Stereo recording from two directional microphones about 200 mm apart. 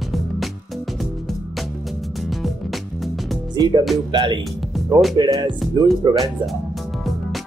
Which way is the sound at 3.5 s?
20° right (ahead or behind).